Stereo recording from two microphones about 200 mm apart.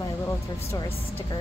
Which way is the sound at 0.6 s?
15° left (ahead or behind).